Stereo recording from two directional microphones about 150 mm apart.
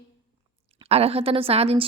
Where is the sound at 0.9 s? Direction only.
40° right (ahead or behind).